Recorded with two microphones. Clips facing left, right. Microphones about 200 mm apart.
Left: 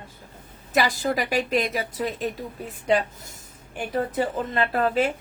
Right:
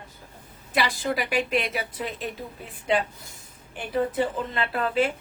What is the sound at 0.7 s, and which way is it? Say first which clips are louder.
A woman's voice: left 3 dB; 40° left (ahead or behind).